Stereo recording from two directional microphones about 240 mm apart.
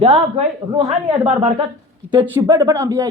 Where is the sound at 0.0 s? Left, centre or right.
Right.